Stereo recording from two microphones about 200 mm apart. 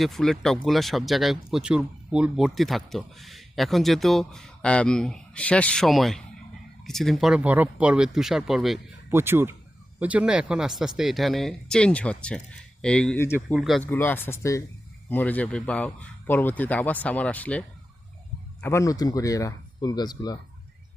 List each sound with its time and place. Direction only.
0.0 s speech: centre (ahead or behind)
9.0 s a man's voice: 10° right (ahead or behind); by 20.4 s 20° left (ahead or behind)